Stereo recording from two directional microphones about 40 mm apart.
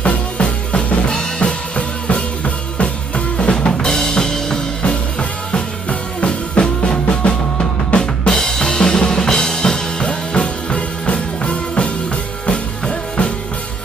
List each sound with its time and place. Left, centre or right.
0.0 s drum kit: left
5.5 s music: left
10.0 s music: left